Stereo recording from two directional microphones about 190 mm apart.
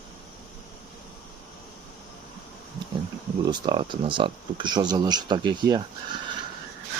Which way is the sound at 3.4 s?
20° right (ahead or behind).